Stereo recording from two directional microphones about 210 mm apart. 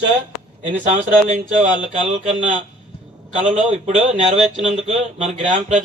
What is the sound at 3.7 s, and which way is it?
Speech, 30° right (ahead or behind).